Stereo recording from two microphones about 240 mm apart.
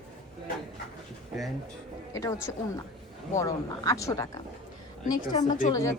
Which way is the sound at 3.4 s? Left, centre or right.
Centre.